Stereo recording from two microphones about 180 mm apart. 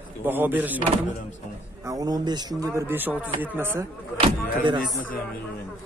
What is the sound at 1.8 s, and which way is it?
A man's voice, 20° right (ahead or behind).